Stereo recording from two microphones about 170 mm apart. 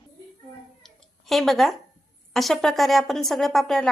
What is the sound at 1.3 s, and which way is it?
Speech, centre (ahead or behind).